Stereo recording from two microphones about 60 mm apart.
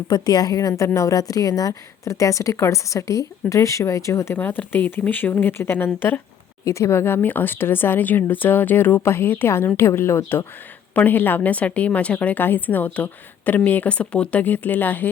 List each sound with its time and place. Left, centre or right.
0.1 s a woman's voice: left
0.7 s a woman's voice: left
4.4 s speech: left
6.7 s speech: left
10.9 s a woman's voice: left